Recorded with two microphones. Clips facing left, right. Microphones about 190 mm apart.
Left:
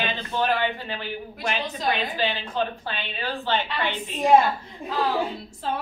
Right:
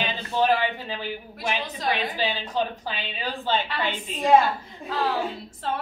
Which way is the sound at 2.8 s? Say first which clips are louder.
Even; 15° right (ahead or behind).